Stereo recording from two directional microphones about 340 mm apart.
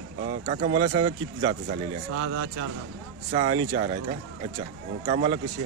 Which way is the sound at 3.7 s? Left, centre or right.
Centre.